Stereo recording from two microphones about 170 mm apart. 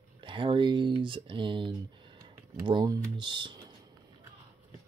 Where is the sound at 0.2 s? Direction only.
30° right (ahead or behind).